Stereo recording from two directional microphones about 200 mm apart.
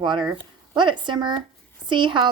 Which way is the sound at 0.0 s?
20° right (ahead or behind).